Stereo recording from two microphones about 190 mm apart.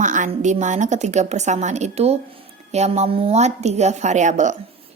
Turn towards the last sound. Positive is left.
turn(degrees=-40)  # may be behind; listen again after turning